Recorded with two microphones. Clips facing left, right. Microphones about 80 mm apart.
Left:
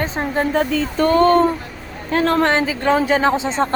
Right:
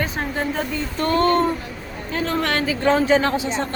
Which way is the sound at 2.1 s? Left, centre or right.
Left.